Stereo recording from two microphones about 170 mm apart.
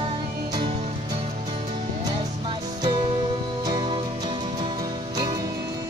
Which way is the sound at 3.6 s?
25° right (ahead or behind).